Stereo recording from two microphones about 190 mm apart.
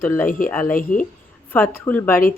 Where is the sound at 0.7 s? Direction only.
45° left (ahead or behind).